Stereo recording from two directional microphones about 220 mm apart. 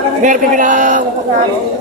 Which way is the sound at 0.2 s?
35° right (ahead or behind).